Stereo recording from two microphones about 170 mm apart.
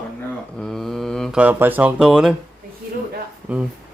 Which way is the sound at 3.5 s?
10° right (ahead or behind).